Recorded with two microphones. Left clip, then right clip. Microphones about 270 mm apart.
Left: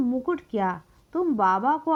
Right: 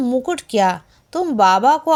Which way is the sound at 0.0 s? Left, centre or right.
Left.